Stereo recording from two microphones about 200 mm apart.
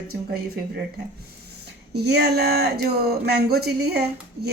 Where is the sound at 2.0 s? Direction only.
55° right (ahead or behind).